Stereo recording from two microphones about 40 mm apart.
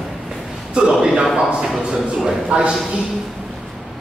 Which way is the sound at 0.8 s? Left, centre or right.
Right.